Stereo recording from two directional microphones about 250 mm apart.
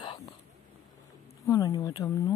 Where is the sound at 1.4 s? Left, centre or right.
Centre.